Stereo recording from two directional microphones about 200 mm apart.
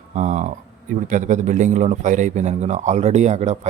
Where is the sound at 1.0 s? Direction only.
40° right (ahead or behind).